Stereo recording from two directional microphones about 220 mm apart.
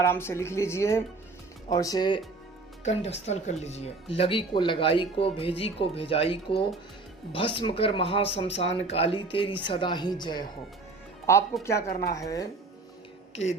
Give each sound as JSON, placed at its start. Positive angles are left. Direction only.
{"t": 0.0, "sound": "speech", "side_deg": 10}
{"t": 11.6, "sound": "speech", "side_deg": 15}